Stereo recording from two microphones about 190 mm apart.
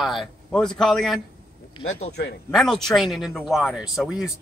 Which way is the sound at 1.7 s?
35° left (ahead or behind).